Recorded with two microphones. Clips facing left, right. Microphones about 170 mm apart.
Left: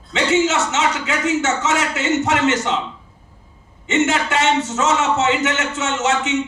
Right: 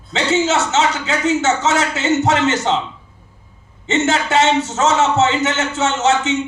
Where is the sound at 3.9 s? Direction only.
35° right (ahead or behind).